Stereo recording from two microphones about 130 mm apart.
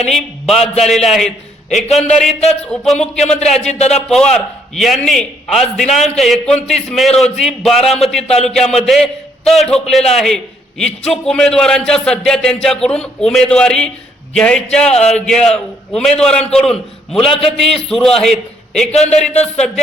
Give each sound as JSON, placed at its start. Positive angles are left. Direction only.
{"t": 0.1, "sound": "a man's voice", "side_deg": 0}
{"t": 3.7, "sound": "speech", "side_deg": 55}
{"t": 4.1, "sound": "a man's voice", "side_deg": 5}
{"t": 18.9, "sound": "speech", "side_deg": 55}